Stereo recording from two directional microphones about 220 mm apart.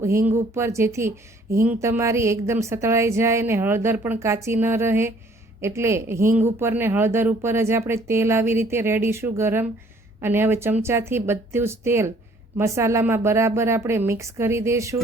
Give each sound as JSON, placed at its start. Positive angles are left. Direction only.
{"t": 0.0, "sound": "speech", "side_deg": -10}